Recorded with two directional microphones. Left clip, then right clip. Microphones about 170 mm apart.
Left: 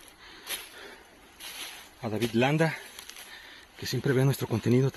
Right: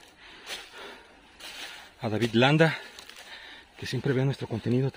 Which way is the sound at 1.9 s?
40° right (ahead or behind).